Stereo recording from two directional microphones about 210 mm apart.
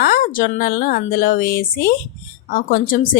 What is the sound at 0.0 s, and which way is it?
A woman's voice, 45° left (ahead or behind).